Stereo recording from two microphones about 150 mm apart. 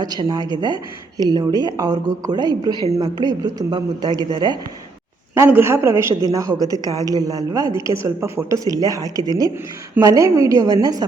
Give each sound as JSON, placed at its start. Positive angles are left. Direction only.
{"t": 0.0, "sound": "speech", "side_deg": -30}
{"t": 5.3, "sound": "a woman's voice", "side_deg": -15}